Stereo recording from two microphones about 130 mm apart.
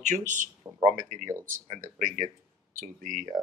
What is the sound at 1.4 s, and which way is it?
Speech, 85° right.